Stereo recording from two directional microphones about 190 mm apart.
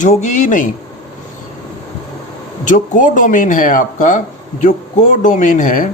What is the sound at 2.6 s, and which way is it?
A man's voice, 40° left (ahead or behind).